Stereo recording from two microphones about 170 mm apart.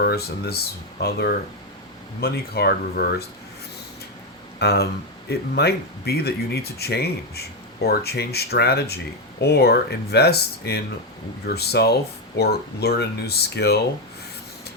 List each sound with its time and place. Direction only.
0.0 s speech: 70° left (ahead or behind)
4.6 s speech: 70° left (ahead or behind)